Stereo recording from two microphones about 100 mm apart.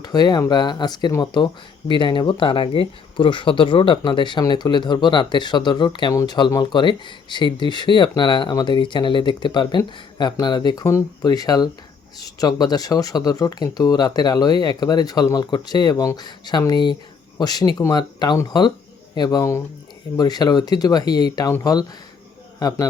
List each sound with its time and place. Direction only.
0.0 s speech: 45° left (ahead or behind)